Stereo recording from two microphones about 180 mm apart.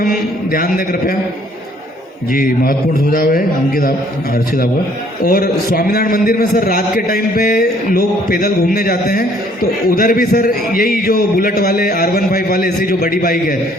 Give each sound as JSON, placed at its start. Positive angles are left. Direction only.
{"t": 0.5, "sound": "a man's voice", "side_deg": 55}
{"t": 2.3, "sound": "a man's voice", "side_deg": 50}
{"t": 5.2, "sound": "a man's voice", "side_deg": 55}